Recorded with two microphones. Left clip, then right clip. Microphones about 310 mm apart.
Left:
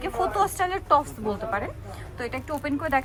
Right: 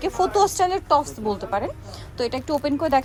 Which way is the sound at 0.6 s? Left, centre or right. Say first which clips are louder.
Right 3 dB; centre.